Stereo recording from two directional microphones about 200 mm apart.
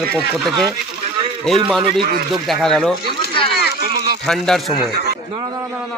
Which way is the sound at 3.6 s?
55° left (ahead or behind).